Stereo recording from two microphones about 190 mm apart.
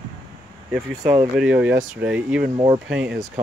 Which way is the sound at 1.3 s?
5° right (ahead or behind).